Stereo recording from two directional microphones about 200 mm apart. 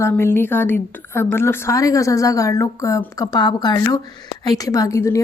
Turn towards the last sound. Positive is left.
turn(degrees=15)  # may be behind; listen again after turning